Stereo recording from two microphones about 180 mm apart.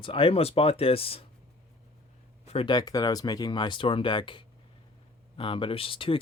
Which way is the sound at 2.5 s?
30° left (ahead or behind).